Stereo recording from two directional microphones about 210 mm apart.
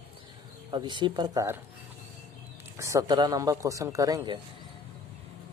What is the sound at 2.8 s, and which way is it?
Speech, 15° right (ahead or behind).